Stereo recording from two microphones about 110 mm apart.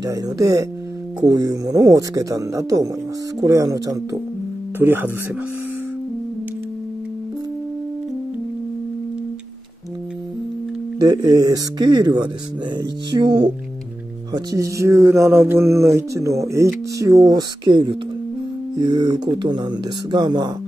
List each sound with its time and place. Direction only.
0.0 s speech: 35° right (ahead or behind)
4.7 s speech: 20° right (ahead or behind)
11.0 s speech: 35° right (ahead or behind)
12.7 s music: 40° right (ahead or behind)
14.3 s speech: 35° right (ahead or behind)
17.6 s music: 45° right (ahead or behind)
18.8 s speech: 45° right (ahead or behind)